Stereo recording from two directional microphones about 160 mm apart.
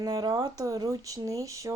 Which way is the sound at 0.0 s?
25° right (ahead or behind).